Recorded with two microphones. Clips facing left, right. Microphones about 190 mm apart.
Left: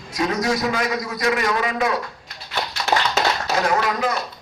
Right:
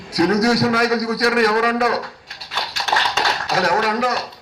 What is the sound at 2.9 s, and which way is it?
Tap, 10° left (ahead or behind).